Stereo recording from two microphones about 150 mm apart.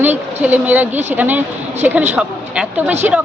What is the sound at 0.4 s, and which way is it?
A woman's voice, 10° right (ahead or behind).